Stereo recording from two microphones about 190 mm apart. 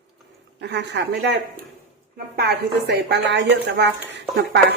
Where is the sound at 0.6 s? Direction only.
65° right (ahead or behind).